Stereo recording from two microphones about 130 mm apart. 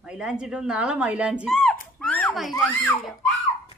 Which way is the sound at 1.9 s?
5° left (ahead or behind).